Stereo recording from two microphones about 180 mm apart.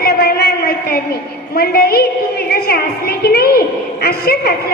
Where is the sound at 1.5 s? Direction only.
60° left (ahead or behind).